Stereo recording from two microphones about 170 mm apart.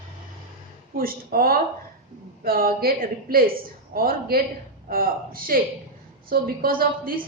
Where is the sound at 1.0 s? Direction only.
60° right (ahead or behind).